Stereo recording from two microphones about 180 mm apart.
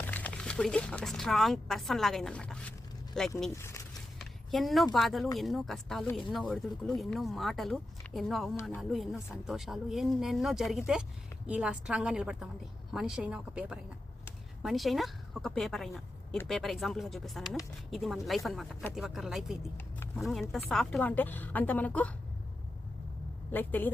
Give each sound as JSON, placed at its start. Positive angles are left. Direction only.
{"t": 0.1, "sound": "speech", "side_deg": 10}
{"t": 3.5, "sound": "speech", "side_deg": 15}
{"t": 4.2, "sound": "a sound", "side_deg": 0}
{"t": 4.9, "sound": "a woman's voice", "side_deg": 0}
{"t": 23.5, "sound": "a woman's voice", "side_deg": 10}